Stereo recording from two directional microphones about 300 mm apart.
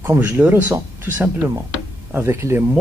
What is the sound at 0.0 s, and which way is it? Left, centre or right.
Speech, centre.